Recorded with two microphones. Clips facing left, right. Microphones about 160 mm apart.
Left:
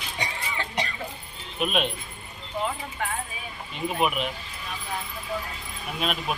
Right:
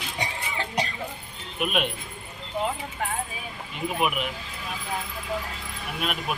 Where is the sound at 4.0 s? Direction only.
5° right (ahead or behind).